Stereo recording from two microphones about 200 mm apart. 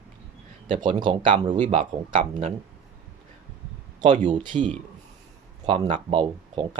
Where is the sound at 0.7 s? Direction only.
25° right (ahead or behind).